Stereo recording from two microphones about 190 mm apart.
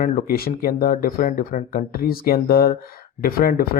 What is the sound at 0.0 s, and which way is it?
Speech, 50° left (ahead or behind).